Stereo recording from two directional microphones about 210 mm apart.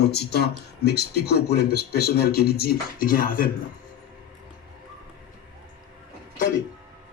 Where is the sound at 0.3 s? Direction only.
50° left (ahead or behind).